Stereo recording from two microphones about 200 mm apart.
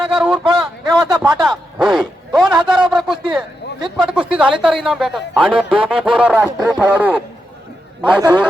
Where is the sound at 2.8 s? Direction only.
Centre (ahead or behind).